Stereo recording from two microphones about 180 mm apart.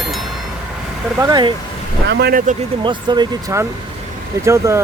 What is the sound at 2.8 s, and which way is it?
Speech, 25° right (ahead or behind).